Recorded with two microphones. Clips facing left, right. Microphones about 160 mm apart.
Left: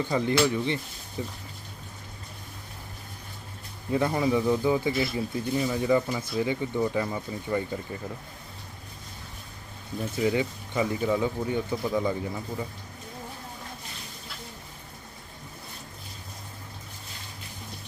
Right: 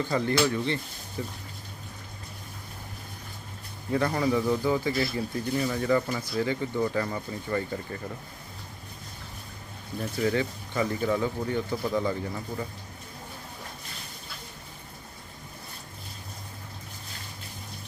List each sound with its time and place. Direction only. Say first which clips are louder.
0.0 s speech: left 1 dB; 15° left (ahead or behind)
3.9 s speech: left 1 dB; 15° left (ahead or behind)
10.2 s speech: left 1 dB; 15° left (ahead or behind)